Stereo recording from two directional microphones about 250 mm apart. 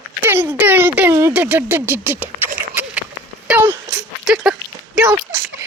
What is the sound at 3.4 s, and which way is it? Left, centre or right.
Sneeze, centre.